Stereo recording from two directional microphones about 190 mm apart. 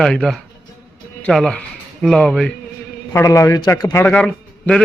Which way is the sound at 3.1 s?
15° left (ahead or behind).